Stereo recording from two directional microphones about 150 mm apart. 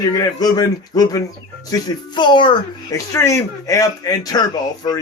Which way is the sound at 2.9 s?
20° left (ahead or behind).